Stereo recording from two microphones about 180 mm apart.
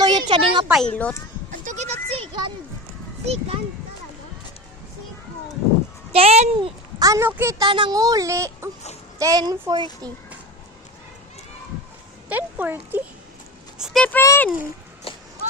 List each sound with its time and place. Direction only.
0.0 s a sound: 25° right (ahead or behind)
0.7 s speech: 5° left (ahead or behind)
1.5 s goat: 40° right (ahead or behind)
3.2 s a child's voice: 35° right (ahead or behind)
6.1 s a child's voice: 35° right (ahead or behind)
7.0 s a woman's voice: 15° right (ahead or behind)
7.7 s speech: 25° right (ahead or behind)
12.3 s a woman's voice: 10° right (ahead or behind); by 14.5 s 10° left (ahead or behind)
15.1 s a sound: 30° left (ahead or behind)